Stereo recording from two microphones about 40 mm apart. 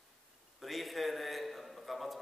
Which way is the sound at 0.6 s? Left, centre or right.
Centre.